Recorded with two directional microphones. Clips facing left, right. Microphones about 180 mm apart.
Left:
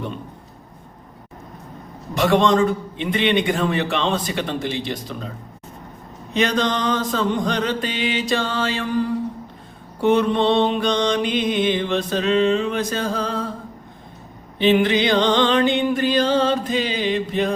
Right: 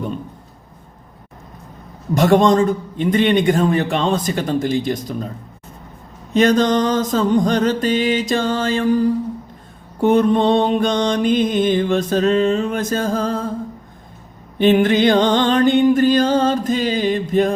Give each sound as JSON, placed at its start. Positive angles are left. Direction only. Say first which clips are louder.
{"t": 2.1, "sound": "mantra", "louder": "right 4 dB", "side_deg": -45}
{"t": 6.3, "sound": "mantra", "louder": "right 6 dB", "side_deg": -45}
{"t": 10.0, "sound": "mantra", "louder": "right 3 dB", "side_deg": -45}
{"t": 14.6, "sound": "mantra", "louder": "right 4 dB", "side_deg": -50}